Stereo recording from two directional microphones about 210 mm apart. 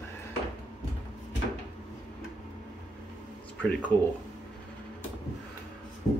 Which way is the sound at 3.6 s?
10° left (ahead or behind).